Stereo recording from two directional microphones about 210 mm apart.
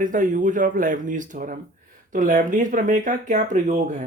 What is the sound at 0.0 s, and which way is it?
Speech, 40° right (ahead or behind).